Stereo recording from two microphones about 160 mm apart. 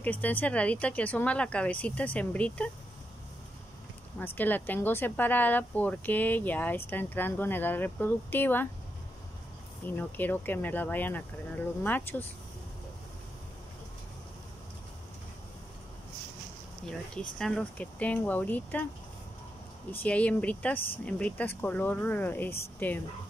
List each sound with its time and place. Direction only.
0.0 s speech: 10° left (ahead or behind)
4.2 s speech: 10° left (ahead or behind)
9.8 s speech: 10° left (ahead or behind)
17.4 s speech: 5° left (ahead or behind)
19.9 s speech: 10° left (ahead or behind)